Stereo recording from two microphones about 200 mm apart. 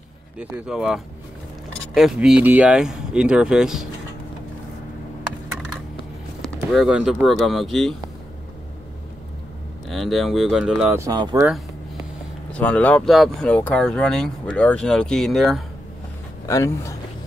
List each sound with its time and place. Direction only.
0.4 s speech: 5° right (ahead or behind)
6.4 s speech: centre (ahead or behind)
9.8 s speech: centre (ahead or behind)
11.0 s speech: 15° right (ahead or behind)
12.5 s speech: 5° left (ahead or behind)
16.4 s speech: 15° left (ahead or behind)